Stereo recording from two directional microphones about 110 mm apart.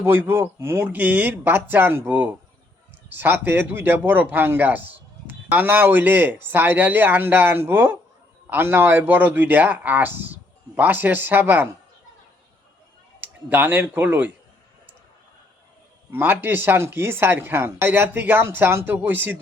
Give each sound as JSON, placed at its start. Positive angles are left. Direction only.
{"t": 0.0, "sound": "a man's voice", "side_deg": -20}
{"t": 13.1, "sound": "speech", "side_deg": -15}
{"t": 16.1, "sound": "speech", "side_deg": -20}